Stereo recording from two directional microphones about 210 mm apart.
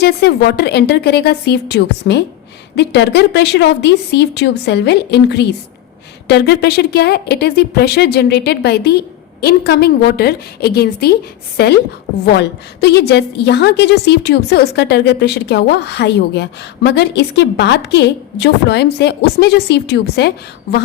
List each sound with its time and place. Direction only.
0.0 s a woman's voice: 50° left (ahead or behind)